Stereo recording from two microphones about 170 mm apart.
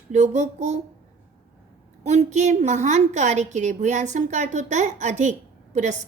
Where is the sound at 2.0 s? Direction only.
40° right (ahead or behind).